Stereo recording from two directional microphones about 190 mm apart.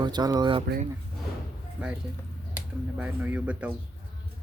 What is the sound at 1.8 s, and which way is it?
Speech, 5° right (ahead or behind).